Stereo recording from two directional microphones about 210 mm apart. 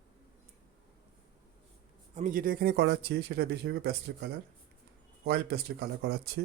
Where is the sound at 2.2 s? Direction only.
40° right (ahead or behind).